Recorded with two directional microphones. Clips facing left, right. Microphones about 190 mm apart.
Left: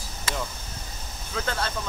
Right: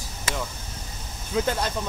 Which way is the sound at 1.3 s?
15° right (ahead or behind).